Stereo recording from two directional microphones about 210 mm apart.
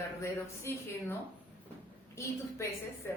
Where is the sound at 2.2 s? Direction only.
15° left (ahead or behind).